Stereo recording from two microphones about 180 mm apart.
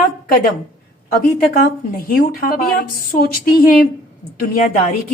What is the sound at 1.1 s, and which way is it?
A woman's voice, 55° left (ahead or behind).